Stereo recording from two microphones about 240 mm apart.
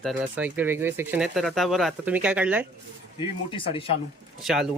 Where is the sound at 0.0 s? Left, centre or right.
Centre.